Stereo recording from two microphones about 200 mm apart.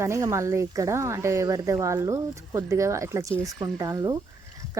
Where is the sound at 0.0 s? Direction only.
15° right (ahead or behind).